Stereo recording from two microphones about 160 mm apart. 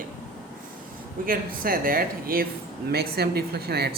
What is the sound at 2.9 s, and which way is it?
A woman's voice, 80° right.